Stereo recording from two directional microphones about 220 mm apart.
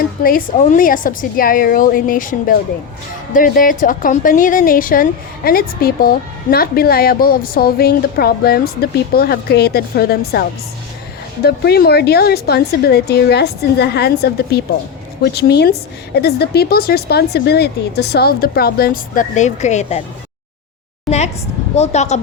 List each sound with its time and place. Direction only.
0.2 s a woman's voice: 40° left (ahead or behind)
11.4 s a woman's voice: 45° left (ahead or behind)
21.8 s a woman's voice: 30° left (ahead or behind)